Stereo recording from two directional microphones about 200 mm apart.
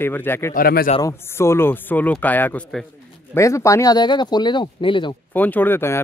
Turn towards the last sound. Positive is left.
turn(degrees=10)  # may be behind; listen again after turning